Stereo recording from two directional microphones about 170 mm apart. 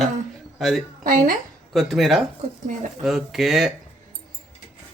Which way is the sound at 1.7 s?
Centre (ahead or behind).